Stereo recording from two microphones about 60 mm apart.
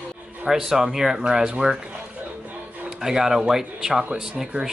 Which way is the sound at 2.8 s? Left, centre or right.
Centre.